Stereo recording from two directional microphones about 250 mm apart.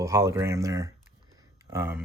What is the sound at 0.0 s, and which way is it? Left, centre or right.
Speech, centre.